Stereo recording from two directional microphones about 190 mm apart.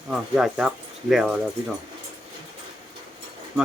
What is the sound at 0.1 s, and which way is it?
Speech, 5° right (ahead or behind).